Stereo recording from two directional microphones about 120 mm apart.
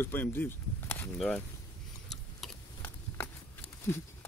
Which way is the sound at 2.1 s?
Centre (ahead or behind).